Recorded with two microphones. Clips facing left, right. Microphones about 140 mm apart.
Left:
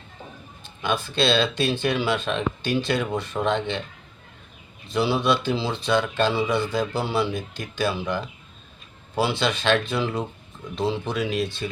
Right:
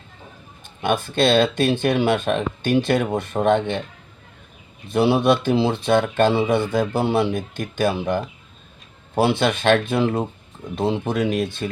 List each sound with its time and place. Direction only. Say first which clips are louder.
0.6 s speech: right 4 dB; 55° right (ahead or behind)
4.9 s speech: right 5 dB; 55° right (ahead or behind)